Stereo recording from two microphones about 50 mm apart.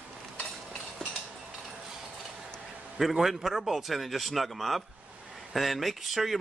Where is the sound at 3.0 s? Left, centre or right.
Centre.